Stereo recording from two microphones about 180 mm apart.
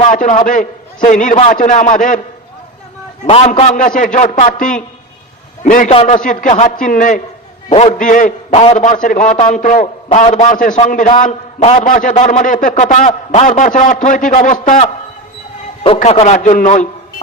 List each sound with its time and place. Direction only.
0.0 s a man's voice: 45° left (ahead or behind)
3.2 s a man's voice: 35° left (ahead or behind)
5.9 s a man's voice: 35° left (ahead or behind)
6.1 s a man's voice: 45° left (ahead or behind)
16.0 s a man's voice: 40° left (ahead or behind)